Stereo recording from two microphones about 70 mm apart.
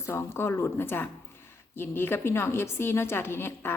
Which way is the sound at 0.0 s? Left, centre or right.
Left.